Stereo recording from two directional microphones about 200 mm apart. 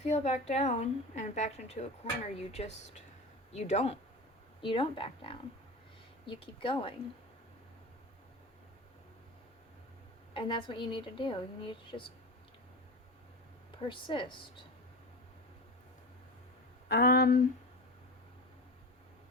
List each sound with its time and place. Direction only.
0.0 s a woman's voice: 35° left (ahead or behind)
10.3 s a woman's voice: 25° left (ahead or behind)
13.7 s speech: 25° left (ahead or behind)
16.9 s speech: 50° left (ahead or behind)